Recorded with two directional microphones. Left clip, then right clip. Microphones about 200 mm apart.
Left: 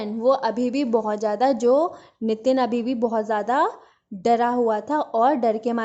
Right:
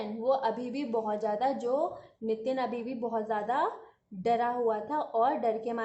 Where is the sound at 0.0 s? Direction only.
45° left (ahead or behind).